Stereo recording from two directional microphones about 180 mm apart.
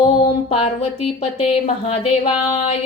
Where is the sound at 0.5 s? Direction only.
30° left (ahead or behind).